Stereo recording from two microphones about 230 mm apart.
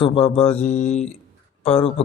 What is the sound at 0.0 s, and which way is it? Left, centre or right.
Speech, left.